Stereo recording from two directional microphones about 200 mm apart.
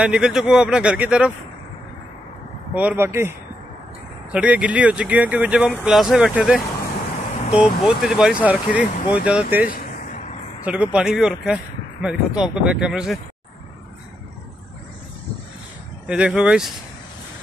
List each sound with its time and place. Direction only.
0.0 s speech: 5° right (ahead or behind)
2.7 s speech: 5° right (ahead or behind)
9.7 s a sound: 45° left (ahead or behind)
10.6 s speech: 5° right (ahead or behind)
16.1 s speech: 5° right (ahead or behind)